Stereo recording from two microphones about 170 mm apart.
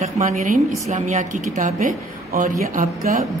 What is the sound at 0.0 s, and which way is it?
A woman's voice, 45° right (ahead or behind).